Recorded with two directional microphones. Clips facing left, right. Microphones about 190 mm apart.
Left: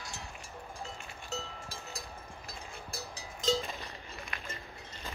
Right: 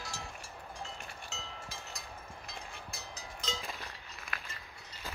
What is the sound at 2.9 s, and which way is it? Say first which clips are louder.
Vehicle: left 3 dB; 35° left (ahead or behind).